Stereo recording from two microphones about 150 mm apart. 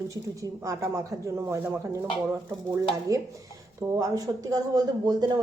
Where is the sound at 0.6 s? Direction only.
20° right (ahead or behind).